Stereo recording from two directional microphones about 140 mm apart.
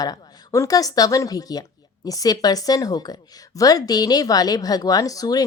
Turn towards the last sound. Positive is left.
turn(degrees=25)  # may be behind; listen again after turning